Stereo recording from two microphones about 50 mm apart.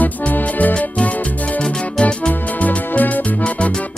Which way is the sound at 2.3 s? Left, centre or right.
Left.